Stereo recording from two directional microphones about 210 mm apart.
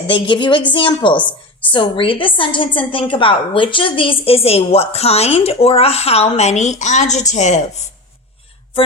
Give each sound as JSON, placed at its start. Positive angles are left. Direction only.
{"t": 0.1, "sound": "a woman's voice", "side_deg": 20}
{"t": 1.2, "sound": "a woman's voice", "side_deg": 5}
{"t": 1.7, "sound": "a woman's voice", "side_deg": 25}